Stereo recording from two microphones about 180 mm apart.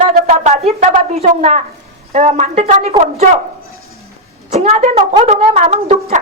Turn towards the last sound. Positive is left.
turn(degrees=-35)  # may be behind; listen again after turning